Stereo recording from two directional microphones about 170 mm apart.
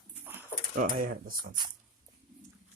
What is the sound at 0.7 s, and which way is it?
Speech, 50° right (ahead or behind).